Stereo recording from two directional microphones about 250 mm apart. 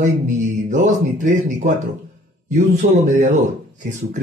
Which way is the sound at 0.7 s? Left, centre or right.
Right.